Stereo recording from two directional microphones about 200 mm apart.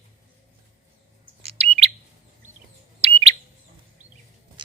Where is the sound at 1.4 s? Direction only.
30° right (ahead or behind).